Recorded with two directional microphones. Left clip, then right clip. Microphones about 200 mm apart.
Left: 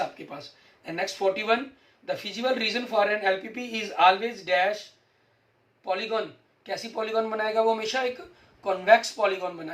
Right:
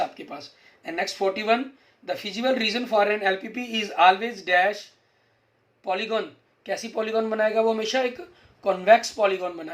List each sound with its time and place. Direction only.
0.9 s speech: 50° right (ahead or behind)
5.8 s speech: 55° right (ahead or behind)